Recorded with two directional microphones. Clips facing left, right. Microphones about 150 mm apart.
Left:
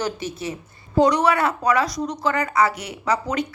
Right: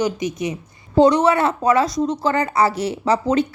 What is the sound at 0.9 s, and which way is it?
Speech, 25° right (ahead or behind).